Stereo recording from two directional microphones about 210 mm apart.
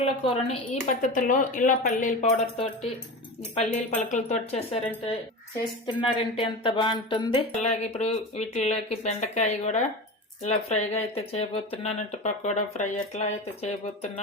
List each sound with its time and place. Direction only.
0.0 s a woman's voice: 30° left (ahead or behind)
5.8 s a woman's voice: 25° left (ahead or behind)